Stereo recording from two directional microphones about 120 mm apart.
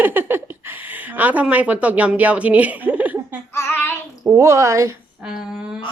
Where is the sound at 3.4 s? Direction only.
20° left (ahead or behind).